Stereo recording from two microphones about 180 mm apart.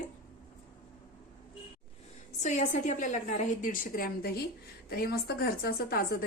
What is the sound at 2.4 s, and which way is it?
A woman's voice, 40° left (ahead or behind).